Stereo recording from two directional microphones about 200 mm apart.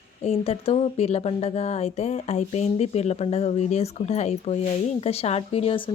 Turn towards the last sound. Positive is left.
turn(degrees=25)  # may be behind; listen again after turning